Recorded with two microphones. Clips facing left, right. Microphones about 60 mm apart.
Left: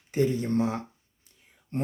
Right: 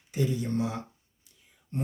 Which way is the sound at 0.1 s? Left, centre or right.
Left.